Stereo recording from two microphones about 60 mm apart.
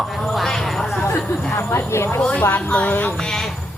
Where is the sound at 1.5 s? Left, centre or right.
Left.